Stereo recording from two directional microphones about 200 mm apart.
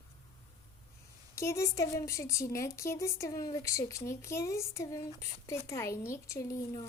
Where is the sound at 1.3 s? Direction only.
15° left (ahead or behind).